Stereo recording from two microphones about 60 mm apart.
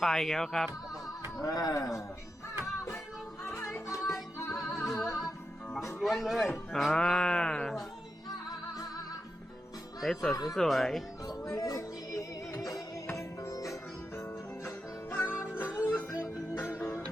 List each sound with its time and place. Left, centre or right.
0.0 s speech: centre
1.4 s speech: left
3.4 s music: left
4.8 s music: centre
6.0 s speech: centre
8.4 s music: left
10.0 s speech: centre
11.3 s music: left
15.1 s music: left